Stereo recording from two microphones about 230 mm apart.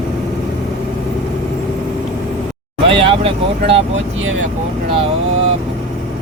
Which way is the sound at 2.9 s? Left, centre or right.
Right.